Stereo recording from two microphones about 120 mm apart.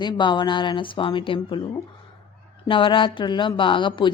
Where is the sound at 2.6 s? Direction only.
45° left (ahead or behind).